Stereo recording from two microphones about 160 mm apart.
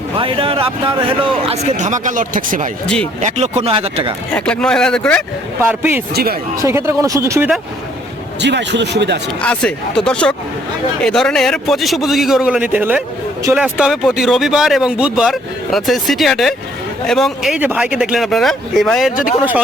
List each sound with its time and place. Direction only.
0.2 s a man's voice: 35° right (ahead or behind); by 2.6 s 55° right (ahead or behind)
2.8 s speech: 5° left (ahead or behind)
3.2 s a man's voice: 45° right (ahead or behind)
4.4 s speech: 5° left (ahead or behind)
5.6 s speech: 10° right (ahead or behind)
8.4 s speech: 90° right
9.4 s speech: 5° left (ahead or behind)